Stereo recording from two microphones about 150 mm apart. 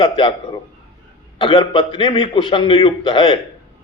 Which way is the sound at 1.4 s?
35° left (ahead or behind).